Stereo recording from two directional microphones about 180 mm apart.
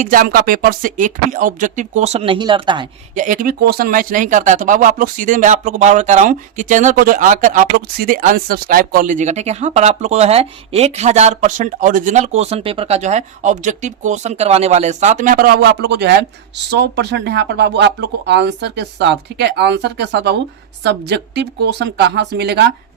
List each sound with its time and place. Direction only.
0.0 s speech: 50° right (ahead or behind); by 2.8 s 25° right (ahead or behind)
3.2 s speech: 45° right (ahead or behind); by 22.7 s 70° right (ahead or behind)